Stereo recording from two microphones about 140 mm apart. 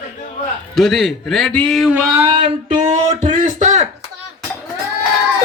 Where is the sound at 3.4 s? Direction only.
60° right (ahead or behind).